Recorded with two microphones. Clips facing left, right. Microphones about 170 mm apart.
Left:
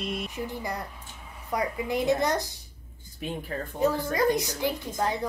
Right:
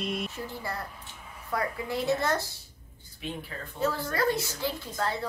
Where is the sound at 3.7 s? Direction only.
15° left (ahead or behind).